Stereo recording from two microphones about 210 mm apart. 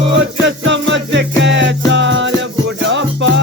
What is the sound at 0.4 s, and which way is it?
Music, 60° right (ahead or behind).